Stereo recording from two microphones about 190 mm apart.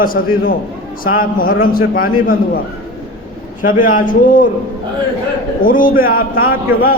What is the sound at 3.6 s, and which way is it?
Speech, 45° left (ahead or behind).